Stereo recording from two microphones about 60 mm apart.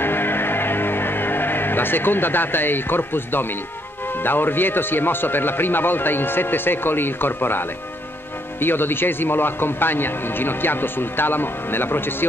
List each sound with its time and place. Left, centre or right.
0.0 s music: left
4.2 s a man's voice: left